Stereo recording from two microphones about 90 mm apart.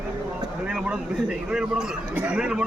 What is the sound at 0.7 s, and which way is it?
A man's voice, 10° right (ahead or behind).